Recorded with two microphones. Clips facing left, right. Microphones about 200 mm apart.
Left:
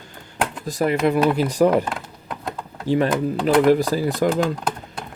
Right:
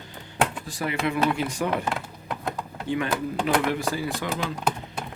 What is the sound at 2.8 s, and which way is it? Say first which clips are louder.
Speech: left 7 dB; 35° left (ahead or behind).